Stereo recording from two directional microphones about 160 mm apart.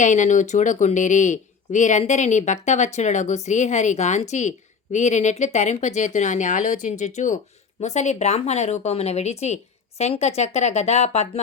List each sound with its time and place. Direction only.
0.0 s speech: 50° left (ahead or behind)